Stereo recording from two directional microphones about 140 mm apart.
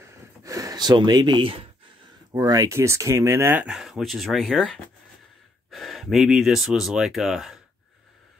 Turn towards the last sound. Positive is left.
turn(degrees=-5)  # may be behind; listen again after turning